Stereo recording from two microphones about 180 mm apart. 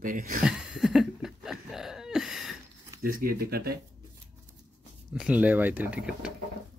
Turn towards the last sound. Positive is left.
turn(degrees=-5)  # may be behind; listen again after turning